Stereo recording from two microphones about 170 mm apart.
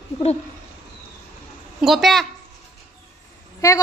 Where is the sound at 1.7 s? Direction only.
Centre (ahead or behind).